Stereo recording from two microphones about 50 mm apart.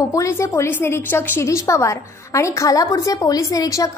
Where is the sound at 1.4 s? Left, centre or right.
Left.